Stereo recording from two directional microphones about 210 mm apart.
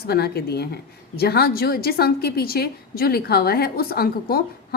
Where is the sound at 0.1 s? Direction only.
50° left (ahead or behind).